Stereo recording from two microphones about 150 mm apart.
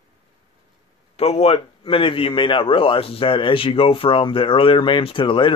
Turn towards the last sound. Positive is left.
turn(degrees=35)  # may be behind; listen again after turning